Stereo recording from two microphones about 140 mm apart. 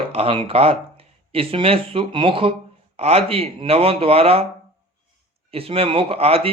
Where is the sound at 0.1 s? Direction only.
45° right (ahead or behind).